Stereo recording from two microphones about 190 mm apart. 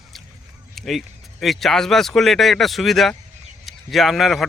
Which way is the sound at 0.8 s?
Centre (ahead or behind).